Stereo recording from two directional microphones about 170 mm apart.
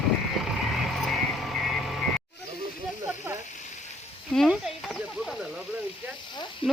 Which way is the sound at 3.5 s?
45° left (ahead or behind).